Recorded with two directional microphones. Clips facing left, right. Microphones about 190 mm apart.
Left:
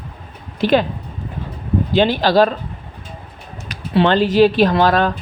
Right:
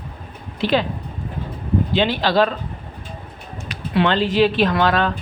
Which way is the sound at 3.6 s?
30° left (ahead or behind).